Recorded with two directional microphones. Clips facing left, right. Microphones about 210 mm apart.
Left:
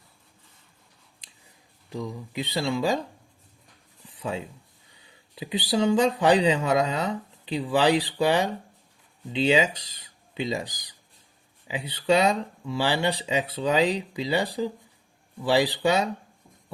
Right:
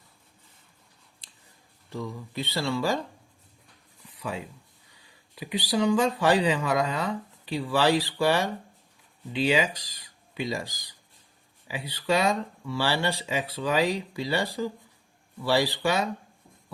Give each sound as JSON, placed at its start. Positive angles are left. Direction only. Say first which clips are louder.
{"t": 1.9, "sound": "speech", "louder": "left 2 dB", "side_deg": 15}
{"t": 4.2, "sound": "speech", "louder": "left 3 dB", "side_deg": 25}